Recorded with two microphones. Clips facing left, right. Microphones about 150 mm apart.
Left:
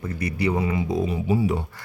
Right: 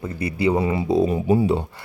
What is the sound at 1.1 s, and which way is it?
Speech, 50° right (ahead or behind).